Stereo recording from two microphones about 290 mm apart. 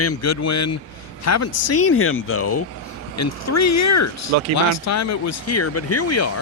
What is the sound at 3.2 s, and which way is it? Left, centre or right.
Speech, left.